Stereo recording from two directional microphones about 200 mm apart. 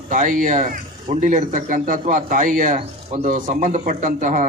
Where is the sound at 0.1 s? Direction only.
40° right (ahead or behind).